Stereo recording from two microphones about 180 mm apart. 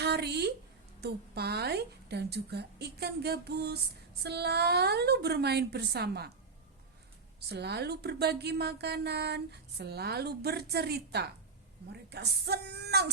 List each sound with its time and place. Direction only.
0.0 s a sound: 65° right (ahead or behind)
1.0 s speech: 60° right (ahead or behind)
7.5 s speech: 65° right (ahead or behind)